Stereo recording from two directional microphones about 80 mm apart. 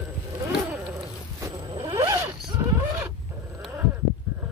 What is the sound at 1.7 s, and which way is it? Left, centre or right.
Zipper, right.